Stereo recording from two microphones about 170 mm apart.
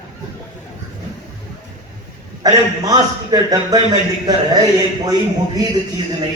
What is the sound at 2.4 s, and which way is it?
A man's voice, 20° right (ahead or behind).